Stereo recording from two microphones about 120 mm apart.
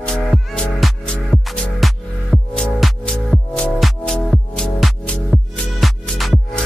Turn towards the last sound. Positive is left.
turn(degrees=0)  # may be behind; listen again after turning